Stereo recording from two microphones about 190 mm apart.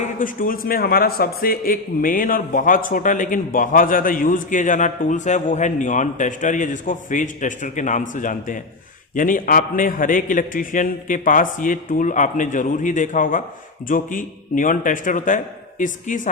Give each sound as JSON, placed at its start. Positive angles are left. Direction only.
{"t": 0.2, "sound": "a man's voice", "side_deg": 50}